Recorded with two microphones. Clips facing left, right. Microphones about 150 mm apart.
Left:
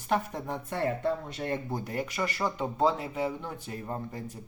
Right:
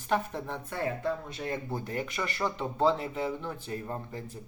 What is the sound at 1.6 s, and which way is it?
Speech, 15° left (ahead or behind).